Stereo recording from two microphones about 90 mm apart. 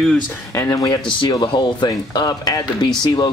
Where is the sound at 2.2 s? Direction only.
40° left (ahead or behind).